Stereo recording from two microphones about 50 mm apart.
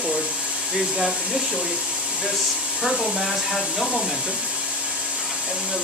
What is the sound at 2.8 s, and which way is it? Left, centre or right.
Speech, centre.